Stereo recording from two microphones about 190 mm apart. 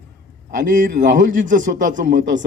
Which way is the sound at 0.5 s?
45° right (ahead or behind).